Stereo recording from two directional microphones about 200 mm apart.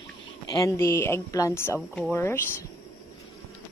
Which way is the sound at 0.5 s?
15° left (ahead or behind).